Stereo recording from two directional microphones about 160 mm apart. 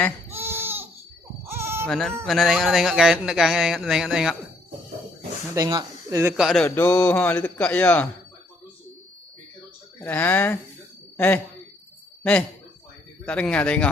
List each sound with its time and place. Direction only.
0.3 s baby cry: 15° right (ahead or behind)
1.5 s bleat: 15° right (ahead or behind)
1.9 s speech: 5° left (ahead or behind)
5.5 s speech: 20° right (ahead or behind)
6.3 s speech: centre (ahead or behind)
6.7 s speech: 15° left (ahead or behind)
10.0 s speech: 10° left (ahead or behind)
13.2 s speech: 5° left (ahead or behind)